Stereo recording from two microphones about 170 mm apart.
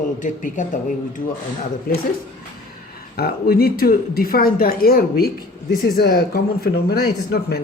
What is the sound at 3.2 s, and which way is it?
Speech, 65° left (ahead or behind).